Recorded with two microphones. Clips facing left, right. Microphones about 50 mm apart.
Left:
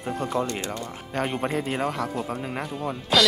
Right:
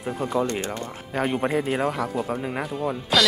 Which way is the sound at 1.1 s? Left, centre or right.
Centre.